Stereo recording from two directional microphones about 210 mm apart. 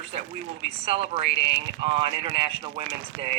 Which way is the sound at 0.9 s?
30° right (ahead or behind).